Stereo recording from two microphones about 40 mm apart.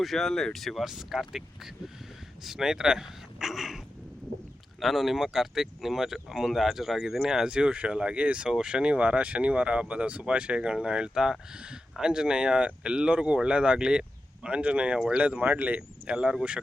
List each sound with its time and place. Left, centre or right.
0.0 s speech: centre
0.3 s speech: centre
0.5 s speech: centre
0.9 s speech: centre
4.8 s speech: centre; by 8.4 s right
8.4 s speech: centre; by 15.8 s right
16.0 s speech: centre